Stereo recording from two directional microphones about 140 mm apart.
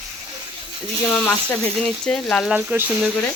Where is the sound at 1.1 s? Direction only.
20° left (ahead or behind).